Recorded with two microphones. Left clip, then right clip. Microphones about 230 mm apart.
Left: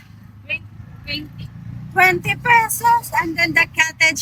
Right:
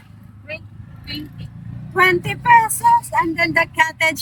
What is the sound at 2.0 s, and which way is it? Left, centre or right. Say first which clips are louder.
Speech: left 1 dB; centre.